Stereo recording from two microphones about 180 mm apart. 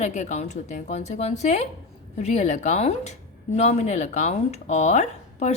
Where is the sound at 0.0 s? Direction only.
40° left (ahead or behind).